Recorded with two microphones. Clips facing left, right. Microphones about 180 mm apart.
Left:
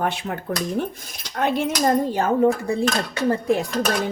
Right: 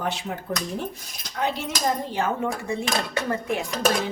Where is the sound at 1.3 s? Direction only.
55° left (ahead or behind).